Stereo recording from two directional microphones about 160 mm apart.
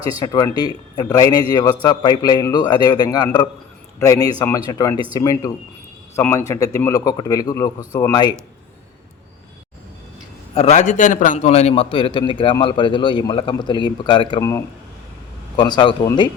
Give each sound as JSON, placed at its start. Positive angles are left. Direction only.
{"t": 0.0, "sound": "a man's voice", "side_deg": 25}
{"t": 10.5, "sound": "a man's voice", "side_deg": 40}
{"t": 15.5, "sound": "a man's voice", "side_deg": 25}